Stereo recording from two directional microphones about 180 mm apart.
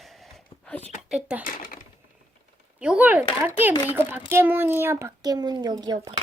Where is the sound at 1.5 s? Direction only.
50° left (ahead or behind).